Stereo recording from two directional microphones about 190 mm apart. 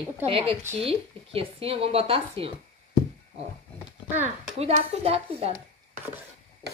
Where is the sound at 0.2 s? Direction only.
30° right (ahead or behind).